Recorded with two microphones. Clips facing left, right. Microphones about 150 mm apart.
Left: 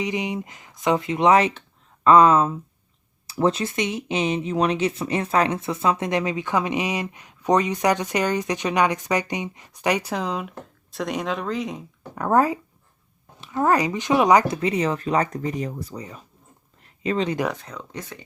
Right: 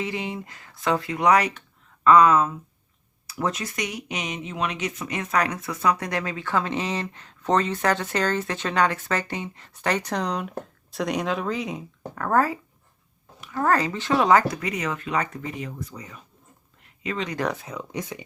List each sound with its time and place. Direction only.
0.0 s speech: 15° left (ahead or behind); by 11.9 s centre (ahead or behind)
12.1 s speech: 20° left (ahead or behind)
16.8 s a sound: 35° left (ahead or behind)
17.5 s speech: 5° right (ahead or behind)